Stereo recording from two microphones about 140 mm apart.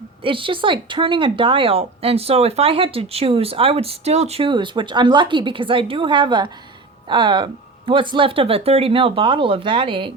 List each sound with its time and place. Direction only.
0.2 s speech: 40° right (ahead or behind)